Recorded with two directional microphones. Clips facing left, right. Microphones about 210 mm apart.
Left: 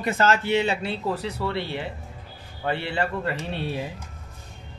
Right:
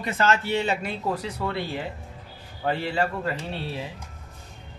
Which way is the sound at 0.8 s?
15° right (ahead or behind).